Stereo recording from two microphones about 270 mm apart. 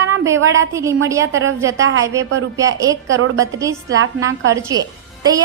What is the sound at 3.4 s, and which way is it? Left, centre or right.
Speech, centre.